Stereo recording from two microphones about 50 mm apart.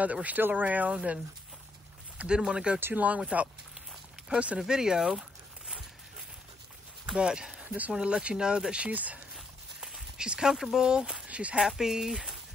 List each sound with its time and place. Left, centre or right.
0.0 s speech: right
2.8 s speech: right
4.3 s speech: right
4.6 s speech: centre
7.2 s speech: centre
7.6 s speech: right
7.9 s speech: centre
8.9 s speech: right
9.8 s walk: centre
10.5 s speech: centre
11.2 s speech: right
11.6 s speech: centre